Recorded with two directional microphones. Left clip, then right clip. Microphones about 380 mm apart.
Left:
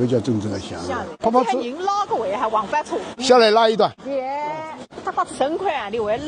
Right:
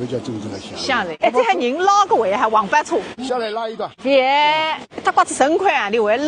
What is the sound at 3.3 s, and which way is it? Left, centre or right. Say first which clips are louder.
Speech: left 9 dB; left.